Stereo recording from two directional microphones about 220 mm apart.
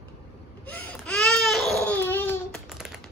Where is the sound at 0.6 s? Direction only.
5° left (ahead or behind).